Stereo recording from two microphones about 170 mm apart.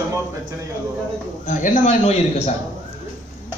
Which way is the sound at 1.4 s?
50° left (ahead or behind).